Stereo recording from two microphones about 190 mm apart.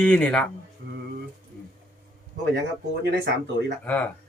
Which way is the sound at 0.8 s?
55° right (ahead or behind).